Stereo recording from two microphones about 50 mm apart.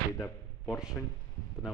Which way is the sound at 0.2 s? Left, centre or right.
Left.